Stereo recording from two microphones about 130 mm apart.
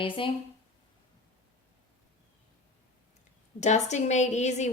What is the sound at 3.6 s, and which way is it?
A woman's voice, 65° left (ahead or behind).